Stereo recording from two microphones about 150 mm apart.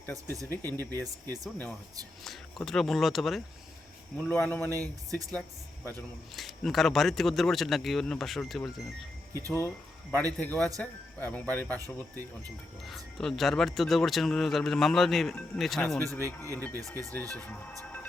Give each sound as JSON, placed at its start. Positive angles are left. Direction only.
{"t": 0.0, "sound": "speech", "side_deg": 15}
{"t": 2.2, "sound": "speech", "side_deg": 0}
{"t": 4.2, "sound": "speech", "side_deg": 10}
{"t": 6.3, "sound": "speech", "side_deg": 0}
{"t": 9.5, "sound": "speech", "side_deg": 15}
{"t": 12.8, "sound": "speech", "side_deg": 0}
{"t": 16.1, "sound": "speech", "side_deg": 15}